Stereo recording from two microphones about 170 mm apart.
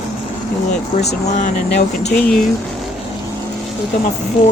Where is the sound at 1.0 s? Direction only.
45° left (ahead or behind).